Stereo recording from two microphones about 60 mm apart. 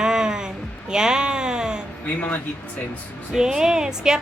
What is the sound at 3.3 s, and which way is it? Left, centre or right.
Speech, centre.